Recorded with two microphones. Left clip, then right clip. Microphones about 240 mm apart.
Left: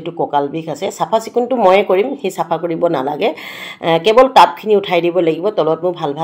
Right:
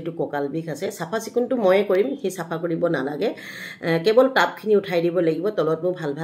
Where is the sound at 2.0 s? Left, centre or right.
Right.